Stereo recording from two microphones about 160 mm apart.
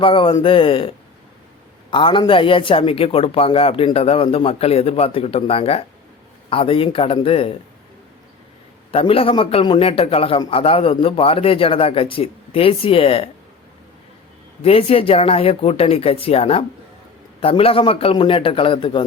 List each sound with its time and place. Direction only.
0.0 s a man's voice: 30° left (ahead or behind)
1.9 s a man's voice: 30° left (ahead or behind)
8.9 s a man's voice: 35° left (ahead or behind)
14.6 s a man's voice: 40° left (ahead or behind)